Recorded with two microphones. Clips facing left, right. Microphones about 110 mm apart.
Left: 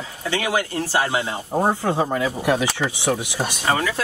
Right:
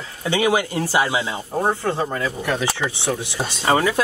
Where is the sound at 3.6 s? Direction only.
25° right (ahead or behind).